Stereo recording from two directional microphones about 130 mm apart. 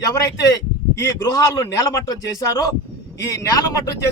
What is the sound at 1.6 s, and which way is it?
Speech, 25° left (ahead or behind).